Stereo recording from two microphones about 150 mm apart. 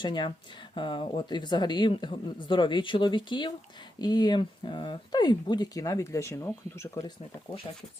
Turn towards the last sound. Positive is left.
turn(degrees=20)  # may be behind; listen again after turning